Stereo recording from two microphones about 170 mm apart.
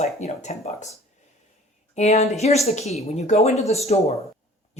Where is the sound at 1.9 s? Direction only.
40° left (ahead or behind).